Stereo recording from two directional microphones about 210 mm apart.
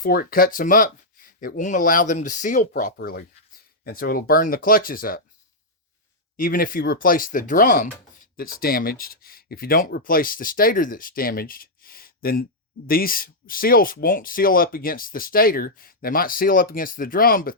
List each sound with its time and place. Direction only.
0.0 s speech: 45° left (ahead or behind)
6.3 s speech: 40° left (ahead or behind)